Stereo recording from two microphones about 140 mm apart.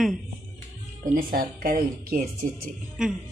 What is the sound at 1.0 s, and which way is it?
Speech, 80° right.